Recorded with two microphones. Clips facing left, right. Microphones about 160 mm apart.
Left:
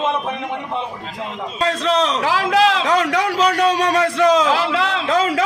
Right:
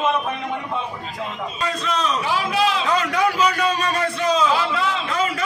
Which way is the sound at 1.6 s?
85° left.